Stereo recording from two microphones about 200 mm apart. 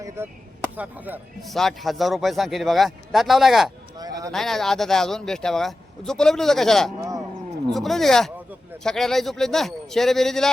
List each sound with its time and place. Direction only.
0.2 s a man's voice: 15° right (ahead or behind)
3.9 s speech: 20° right (ahead or behind)
4.3 s a man's voice: centre (ahead or behind)